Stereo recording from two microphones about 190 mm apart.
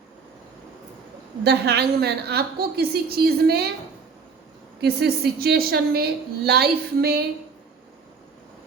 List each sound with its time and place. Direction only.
1.5 s a woman's voice: 60° right (ahead or behind)
4.8 s a woman's voice: 55° right (ahead or behind)